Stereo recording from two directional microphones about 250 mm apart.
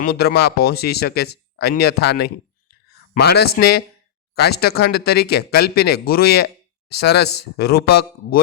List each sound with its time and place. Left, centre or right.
0.0 s speech: left